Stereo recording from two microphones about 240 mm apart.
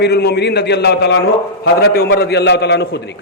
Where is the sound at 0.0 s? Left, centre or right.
Left.